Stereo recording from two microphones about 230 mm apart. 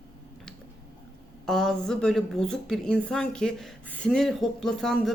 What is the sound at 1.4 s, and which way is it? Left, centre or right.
A woman's voice, centre.